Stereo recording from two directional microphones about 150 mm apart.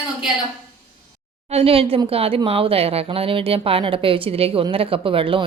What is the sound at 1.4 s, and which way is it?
Speech, 40° right (ahead or behind).